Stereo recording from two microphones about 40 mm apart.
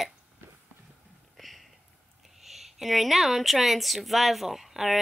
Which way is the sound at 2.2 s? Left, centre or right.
Centre.